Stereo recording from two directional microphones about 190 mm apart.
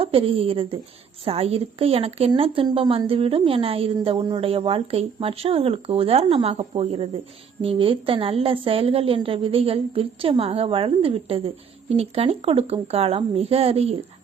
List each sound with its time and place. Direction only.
0.0 s a woman's voice: 30° right (ahead or behind)